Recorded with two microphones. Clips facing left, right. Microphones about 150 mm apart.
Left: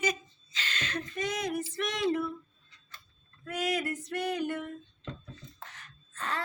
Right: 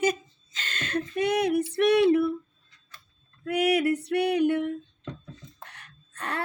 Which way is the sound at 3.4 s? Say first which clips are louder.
Right 9 dB; 65° right (ahead or behind).